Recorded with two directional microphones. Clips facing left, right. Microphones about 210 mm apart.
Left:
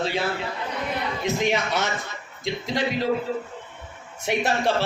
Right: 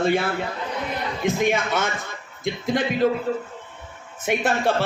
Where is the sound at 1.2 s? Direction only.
50° right (ahead or behind).